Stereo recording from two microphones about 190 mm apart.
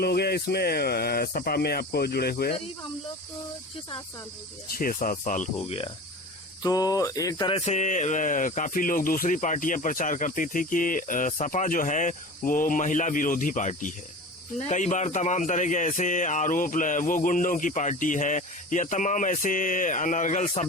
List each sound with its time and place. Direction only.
0.0 s speech: 55° left (ahead or behind)
4.8 s a man's voice: 45° left (ahead or behind)
6.6 s mantra: 20° left (ahead or behind); by 13.9 s 40° left (ahead or behind)
14.7 s a man's voice: 40° left (ahead or behind)